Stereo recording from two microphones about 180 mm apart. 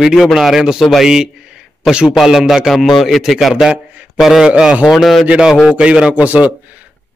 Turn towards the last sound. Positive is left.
turn(degrees=-10)  # may be behind; listen again after turning